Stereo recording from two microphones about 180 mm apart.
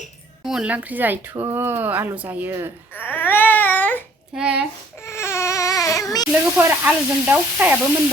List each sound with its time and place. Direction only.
0.4 s speech: 5° right (ahead or behind)
2.9 s a sound: 10° left (ahead or behind)
4.4 s speech: 5° right (ahead or behind)
5.0 s baby cry: 15° left (ahead or behind)
6.6 s speech: 10° right (ahead or behind)